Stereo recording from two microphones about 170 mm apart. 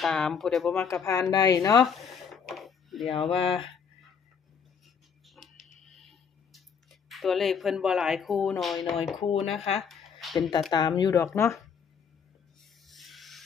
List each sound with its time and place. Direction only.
0.0 s speech: 5° left (ahead or behind)
1.0 s speech: 20° left (ahead or behind)
1.8 s a sound: centre (ahead or behind)
3.2 s speech: 35° left (ahead or behind)
5.2 s tick-tock: centre (ahead or behind)
9.6 s speech: 40° left (ahead or behind)
9.8 s a sound: centre (ahead or behind)
10.7 s speech: 25° left (ahead or behind)
12.5 s rub: centre (ahead or behind)